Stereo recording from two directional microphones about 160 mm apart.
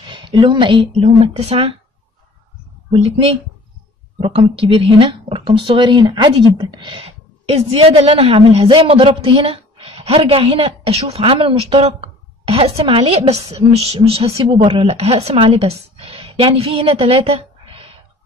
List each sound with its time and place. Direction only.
0.0 s speech: 30° right (ahead or behind)
2.9 s a woman's voice: 40° right (ahead or behind)